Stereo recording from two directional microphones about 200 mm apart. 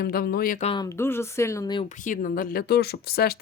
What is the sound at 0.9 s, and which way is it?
Speech, 10° left (ahead or behind).